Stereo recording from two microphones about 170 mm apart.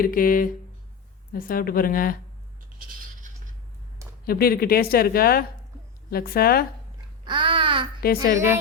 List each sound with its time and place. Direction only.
0.0 s a woman's voice: 55° left (ahead or behind)
2.7 s a sound: 50° right (ahead or behind)
4.3 s a woman's voice: 60° left (ahead or behind)
7.3 s babbling: 30° right (ahead or behind)
8.0 s a woman's voice: 60° left (ahead or behind)